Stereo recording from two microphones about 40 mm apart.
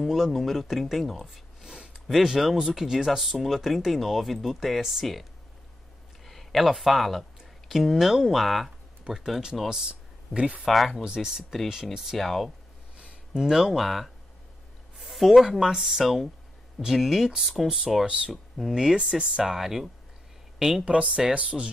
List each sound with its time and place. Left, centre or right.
0.0 s speech: centre
1.6 s speech: centre
6.2 s speech: centre
9.8 s a sound: right
10.6 s speech: centre
11.7 s speech: centre
12.2 s speech: centre
12.9 s a sound: right
13.4 s speech: centre
15.0 s a sound: centre
15.6 s speech: centre
19.4 s a woman's voice: centre
20.8 s speech: right